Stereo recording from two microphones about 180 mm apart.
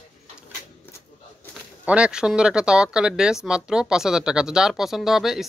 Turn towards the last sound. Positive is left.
turn(degrees=0)  # may be behind; listen again after turning